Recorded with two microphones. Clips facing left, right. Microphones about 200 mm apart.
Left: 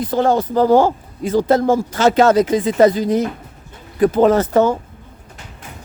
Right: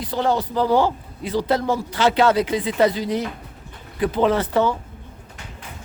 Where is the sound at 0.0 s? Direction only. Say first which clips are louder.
Left 5 dB; 50° left (ahead or behind).